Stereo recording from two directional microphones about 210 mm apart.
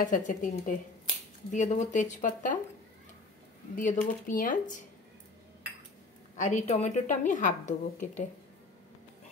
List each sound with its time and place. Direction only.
0.0 s a woman's voice: 40° left (ahead or behind)
3.7 s a woman's voice: 40° left (ahead or behind)
6.4 s a woman's voice: 35° left (ahead or behind)